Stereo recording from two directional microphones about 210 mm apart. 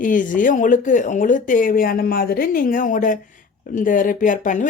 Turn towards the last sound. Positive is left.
turn(degrees=40)  # may be behind; listen again after turning